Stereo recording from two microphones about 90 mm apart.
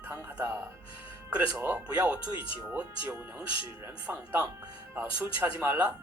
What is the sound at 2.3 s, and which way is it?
Speech, 70° left (ahead or behind).